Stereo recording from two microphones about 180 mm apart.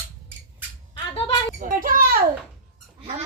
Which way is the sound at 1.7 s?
50° right (ahead or behind).